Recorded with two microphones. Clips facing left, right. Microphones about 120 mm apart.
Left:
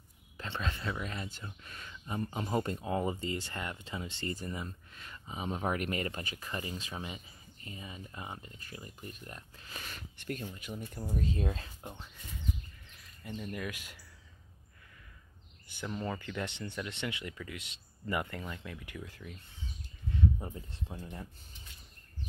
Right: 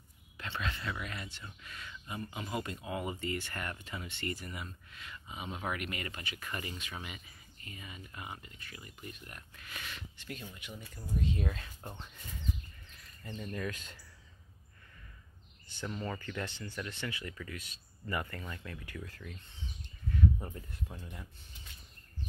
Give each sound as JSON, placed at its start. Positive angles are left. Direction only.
{"t": 0.6, "sound": "speech", "side_deg": 35}
{"t": 10.1, "sound": "speech", "side_deg": 50}
{"t": 13.2, "sound": "speech", "side_deg": 10}
{"t": 15.7, "sound": "speech", "side_deg": 15}
{"t": 16.4, "sound": "speech", "side_deg": 20}
{"t": 20.7, "sound": "speech", "side_deg": 30}